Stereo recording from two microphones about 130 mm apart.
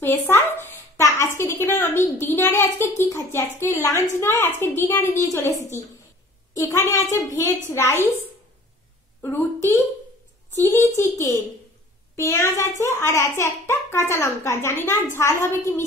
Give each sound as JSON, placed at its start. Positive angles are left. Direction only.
{"t": 0.0, "sound": "a woman's voice", "side_deg": 15}
{"t": 9.2, "sound": "a woman's voice", "side_deg": 15}